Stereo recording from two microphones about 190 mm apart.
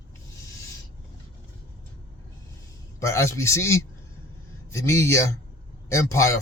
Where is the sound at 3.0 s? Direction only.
15° left (ahead or behind).